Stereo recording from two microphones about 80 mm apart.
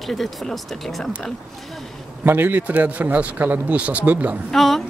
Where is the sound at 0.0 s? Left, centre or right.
Centre.